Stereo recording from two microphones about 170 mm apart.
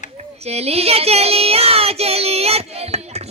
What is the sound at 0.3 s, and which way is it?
Speech, 40° right (ahead or behind).